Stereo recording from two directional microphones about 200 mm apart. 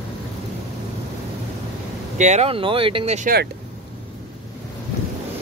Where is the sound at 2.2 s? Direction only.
35° right (ahead or behind).